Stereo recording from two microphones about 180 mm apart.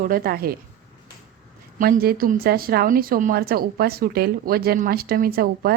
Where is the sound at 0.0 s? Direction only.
55° right (ahead or behind).